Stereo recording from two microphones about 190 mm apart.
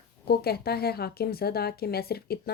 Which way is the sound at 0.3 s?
55° left (ahead or behind).